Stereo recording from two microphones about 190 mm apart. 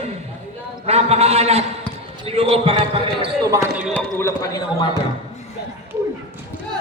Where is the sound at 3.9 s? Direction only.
10° left (ahead or behind).